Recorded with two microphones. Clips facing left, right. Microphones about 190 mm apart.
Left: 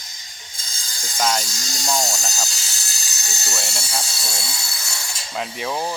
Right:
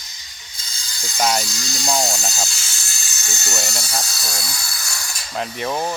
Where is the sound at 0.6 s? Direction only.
45° left (ahead or behind).